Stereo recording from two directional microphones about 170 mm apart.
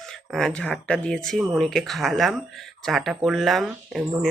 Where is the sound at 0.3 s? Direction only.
Centre (ahead or behind).